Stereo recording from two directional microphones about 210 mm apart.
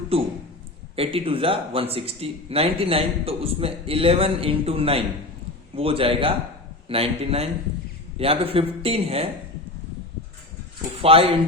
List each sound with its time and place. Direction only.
0.1 s speech: 25° right (ahead or behind)
11.0 s speech: 25° right (ahead or behind)